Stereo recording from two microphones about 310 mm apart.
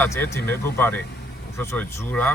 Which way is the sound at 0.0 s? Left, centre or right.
Centre.